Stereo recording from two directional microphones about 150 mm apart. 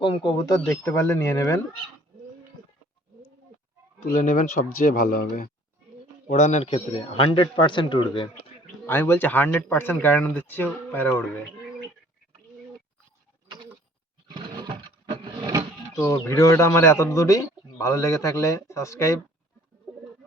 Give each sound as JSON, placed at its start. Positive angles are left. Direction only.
{"t": 0.0, "sound": "a man's voice", "side_deg": 35}
{"t": 4.0, "sound": "speech", "side_deg": 60}
{"t": 4.9, "sound": "speech", "side_deg": 70}
{"t": 6.2, "sound": "a man's voice", "side_deg": 50}
{"t": 8.9, "sound": "speech", "side_deg": 15}
{"t": 14.3, "sound": "a sound", "side_deg": -30}
{"t": 15.2, "sound": "vehicle", "side_deg": -25}
{"t": 15.9, "sound": "a man's voice", "side_deg": 20}